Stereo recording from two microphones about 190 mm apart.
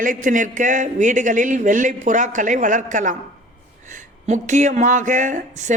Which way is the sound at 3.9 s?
40° right (ahead or behind).